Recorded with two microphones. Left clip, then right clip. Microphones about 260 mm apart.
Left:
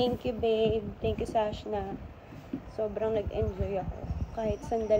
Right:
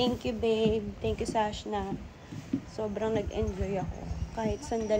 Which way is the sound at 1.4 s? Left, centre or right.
Right.